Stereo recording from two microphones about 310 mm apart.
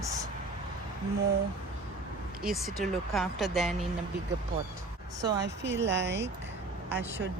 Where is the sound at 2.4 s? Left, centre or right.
Centre.